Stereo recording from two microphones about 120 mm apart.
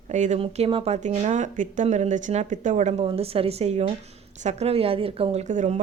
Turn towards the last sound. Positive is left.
turn(degrees=-90)